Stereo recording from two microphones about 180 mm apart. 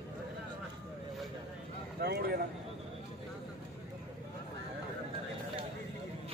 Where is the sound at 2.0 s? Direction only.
65° right (ahead or behind).